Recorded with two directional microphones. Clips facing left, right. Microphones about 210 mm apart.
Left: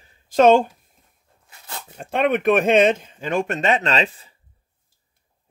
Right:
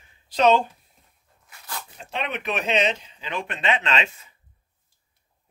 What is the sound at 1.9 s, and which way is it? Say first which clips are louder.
Speech: left 12 dB; 50° left (ahead or behind).